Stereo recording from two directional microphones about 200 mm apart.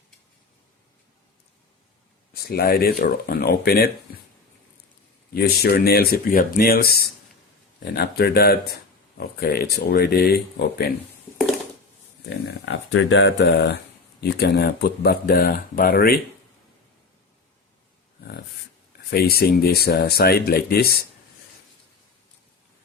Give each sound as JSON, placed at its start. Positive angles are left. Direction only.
{"t": 2.3, "sound": "speech", "side_deg": 50}
{"t": 5.3, "sound": "speech", "side_deg": 50}
{"t": 12.5, "sound": "speech", "side_deg": 65}
{"t": 19.1, "sound": "speech", "side_deg": 50}